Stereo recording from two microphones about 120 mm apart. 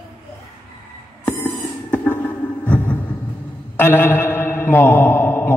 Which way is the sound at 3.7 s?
15° left (ahead or behind).